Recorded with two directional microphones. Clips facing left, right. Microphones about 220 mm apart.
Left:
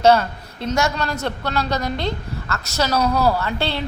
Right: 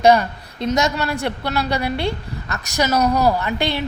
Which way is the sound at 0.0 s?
15° right (ahead or behind).